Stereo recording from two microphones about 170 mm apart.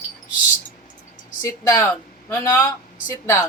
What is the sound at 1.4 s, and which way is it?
Speech, 15° left (ahead or behind).